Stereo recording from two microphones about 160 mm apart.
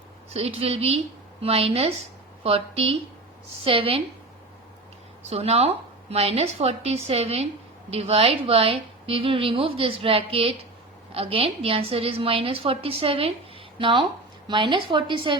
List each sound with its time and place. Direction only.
0.3 s a woman's voice: 40° right (ahead or behind)
5.3 s a woman's voice: 40° right (ahead or behind)